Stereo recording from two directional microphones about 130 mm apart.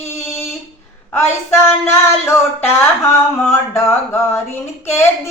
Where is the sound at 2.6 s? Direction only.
20° left (ahead or behind).